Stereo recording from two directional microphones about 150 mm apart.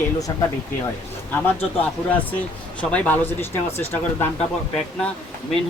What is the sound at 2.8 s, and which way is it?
Speech, 10° left (ahead or behind).